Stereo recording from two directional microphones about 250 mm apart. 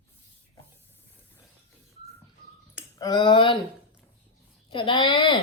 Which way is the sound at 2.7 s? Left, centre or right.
Centre.